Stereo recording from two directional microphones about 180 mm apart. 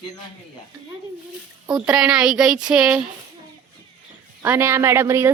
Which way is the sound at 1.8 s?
5° right (ahead or behind).